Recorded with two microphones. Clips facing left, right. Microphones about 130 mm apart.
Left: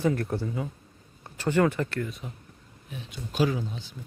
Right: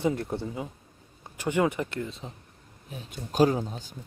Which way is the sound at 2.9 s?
40° right (ahead or behind).